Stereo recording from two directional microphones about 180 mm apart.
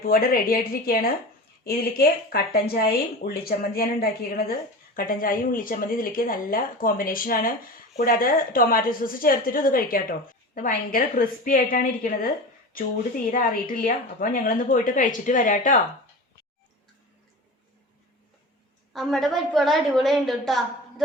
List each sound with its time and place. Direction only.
0.0 s a woman's voice: 55° left (ahead or behind)
13.3 s a woman's voice: 50° left (ahead or behind)
18.9 s a woman's voice: centre (ahead or behind)